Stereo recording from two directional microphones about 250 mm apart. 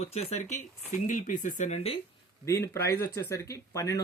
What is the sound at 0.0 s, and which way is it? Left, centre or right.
Speech, left.